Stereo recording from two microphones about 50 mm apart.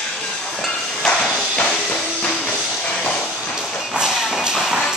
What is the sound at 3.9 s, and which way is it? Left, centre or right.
Shuffle, centre.